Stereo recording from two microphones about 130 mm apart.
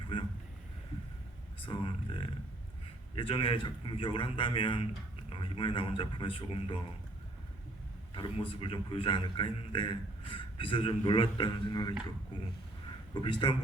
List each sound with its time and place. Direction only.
1.6 s a man's voice: 40° left (ahead or behind)
8.1 s a man's voice: 40° left (ahead or behind)
13.2 s speech: 40° left (ahead or behind)